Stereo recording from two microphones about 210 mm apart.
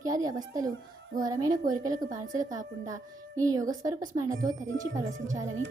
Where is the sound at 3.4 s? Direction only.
15° right (ahead or behind).